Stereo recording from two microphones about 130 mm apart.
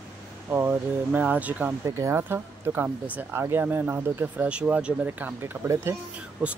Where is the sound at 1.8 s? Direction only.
25° right (ahead or behind).